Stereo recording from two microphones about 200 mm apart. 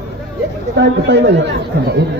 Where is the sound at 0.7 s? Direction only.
60° right (ahead or behind).